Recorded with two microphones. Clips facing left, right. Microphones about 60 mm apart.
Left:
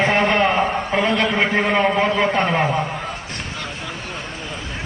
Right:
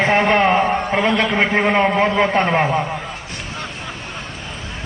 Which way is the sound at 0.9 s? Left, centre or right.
Centre.